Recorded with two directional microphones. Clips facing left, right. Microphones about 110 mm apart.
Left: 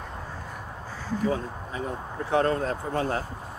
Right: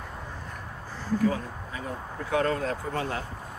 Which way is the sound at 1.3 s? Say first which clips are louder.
Left 3 dB; 25° left (ahead or behind).